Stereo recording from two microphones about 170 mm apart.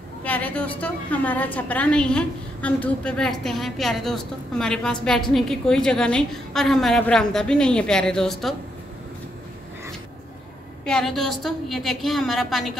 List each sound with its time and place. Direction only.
0.2 s a woman's voice: 10° left (ahead or behind)
10.9 s a woman's voice: 5° left (ahead or behind)